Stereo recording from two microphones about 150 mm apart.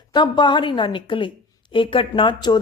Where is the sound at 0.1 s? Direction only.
30° left (ahead or behind).